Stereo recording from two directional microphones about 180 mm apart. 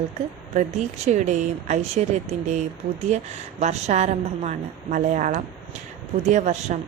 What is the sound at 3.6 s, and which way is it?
A woman's voice, 40° right (ahead or behind).